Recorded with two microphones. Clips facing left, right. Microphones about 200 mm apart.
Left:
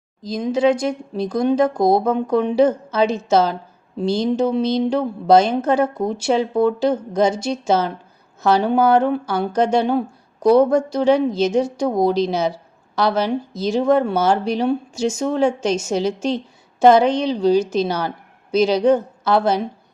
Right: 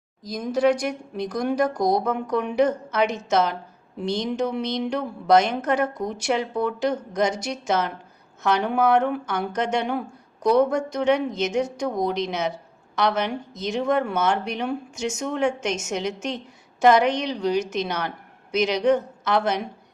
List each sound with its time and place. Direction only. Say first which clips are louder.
0.2 s a woman's voice: left 4 dB; 25° left (ahead or behind)